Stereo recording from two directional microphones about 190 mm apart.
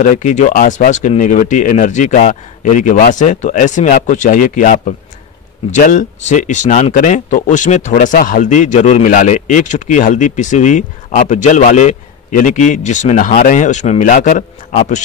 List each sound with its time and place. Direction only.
0.0 s speech: 40° left (ahead or behind)